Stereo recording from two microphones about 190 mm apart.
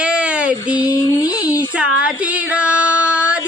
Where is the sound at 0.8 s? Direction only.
15° left (ahead or behind).